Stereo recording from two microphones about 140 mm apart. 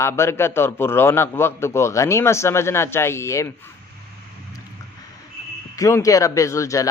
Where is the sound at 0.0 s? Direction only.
20° left (ahead or behind).